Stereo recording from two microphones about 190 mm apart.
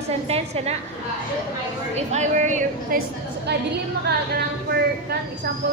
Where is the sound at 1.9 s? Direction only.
35° right (ahead or behind).